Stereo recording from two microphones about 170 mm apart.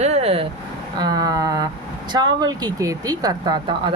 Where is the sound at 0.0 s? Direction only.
35° right (ahead or behind).